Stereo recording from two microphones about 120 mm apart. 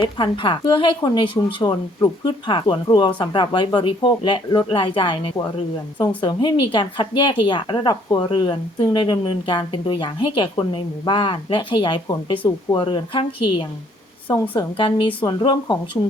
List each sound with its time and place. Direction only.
0.0 s a woman's voice: 40° left (ahead or behind)